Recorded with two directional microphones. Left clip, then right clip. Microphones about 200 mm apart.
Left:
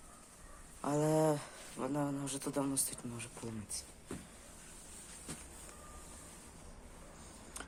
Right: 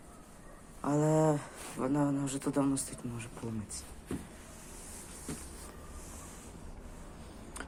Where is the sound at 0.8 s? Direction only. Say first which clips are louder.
Right 3 dB; 20° left (ahead or behind).